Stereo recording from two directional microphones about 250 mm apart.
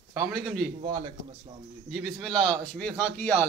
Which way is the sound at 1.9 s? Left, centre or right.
Centre.